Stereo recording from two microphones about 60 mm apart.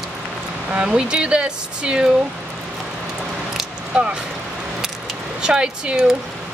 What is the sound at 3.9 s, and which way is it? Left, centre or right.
Speech, centre.